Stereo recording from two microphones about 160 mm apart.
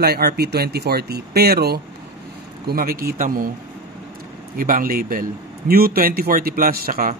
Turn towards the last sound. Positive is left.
turn(degrees=-60)  # may be behind; listen again after turning